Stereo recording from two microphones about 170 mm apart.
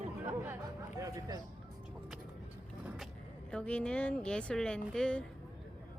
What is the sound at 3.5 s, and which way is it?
Speech, 5° left (ahead or behind).